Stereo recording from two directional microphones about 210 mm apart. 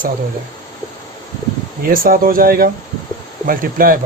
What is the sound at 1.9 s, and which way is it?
Speech, 45° right (ahead or behind).